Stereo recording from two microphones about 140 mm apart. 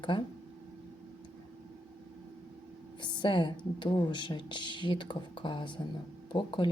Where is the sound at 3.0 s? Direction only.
35° left (ahead or behind).